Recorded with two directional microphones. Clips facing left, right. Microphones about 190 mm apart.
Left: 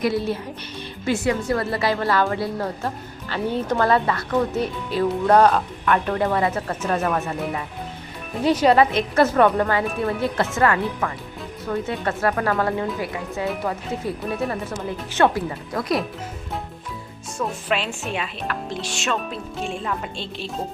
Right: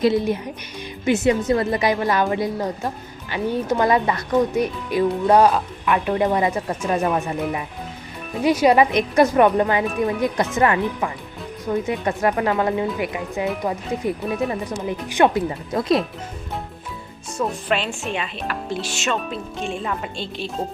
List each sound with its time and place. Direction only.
0.0 s speech: 20° right (ahead or behind)
8.4 s speech: 10° right (ahead or behind)
17.3 s speech: centre (ahead or behind)